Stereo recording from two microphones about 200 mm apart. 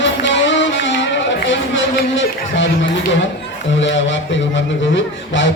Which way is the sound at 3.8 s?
65° left (ahead or behind).